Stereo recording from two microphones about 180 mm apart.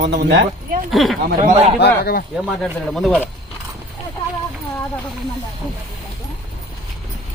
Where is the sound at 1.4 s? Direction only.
35° right (ahead or behind).